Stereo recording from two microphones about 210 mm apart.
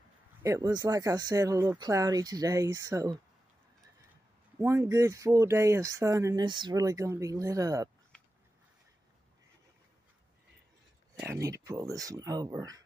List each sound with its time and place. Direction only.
0.4 s speech: 15° right (ahead or behind)
4.6 s speech: 10° right (ahead or behind)
8.1 s a sound: 5° left (ahead or behind)
11.1 s speech: 15° right (ahead or behind)